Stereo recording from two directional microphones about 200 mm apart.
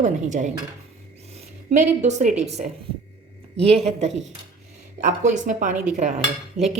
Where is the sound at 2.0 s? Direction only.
35° right (ahead or behind).